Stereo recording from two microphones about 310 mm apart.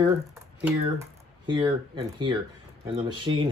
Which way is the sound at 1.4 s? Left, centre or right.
Centre.